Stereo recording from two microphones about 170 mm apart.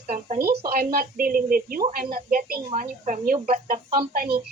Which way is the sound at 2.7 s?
50° right (ahead or behind).